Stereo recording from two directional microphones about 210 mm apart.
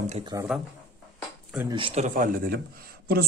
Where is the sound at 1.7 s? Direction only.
25° right (ahead or behind).